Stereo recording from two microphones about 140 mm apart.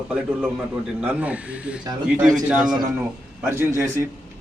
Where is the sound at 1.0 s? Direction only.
10° right (ahead or behind).